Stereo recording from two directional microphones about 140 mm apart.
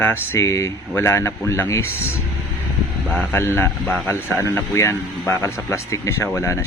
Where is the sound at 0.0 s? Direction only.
15° left (ahead or behind).